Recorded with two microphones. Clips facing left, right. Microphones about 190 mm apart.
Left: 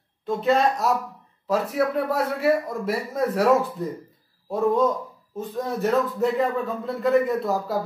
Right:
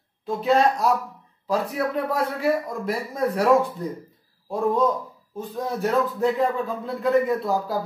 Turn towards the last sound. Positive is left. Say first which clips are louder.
# even
turn(degrees=0)  # may be behind; listen again after turning